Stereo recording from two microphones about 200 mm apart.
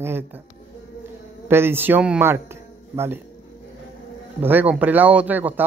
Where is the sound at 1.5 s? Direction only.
10° right (ahead or behind).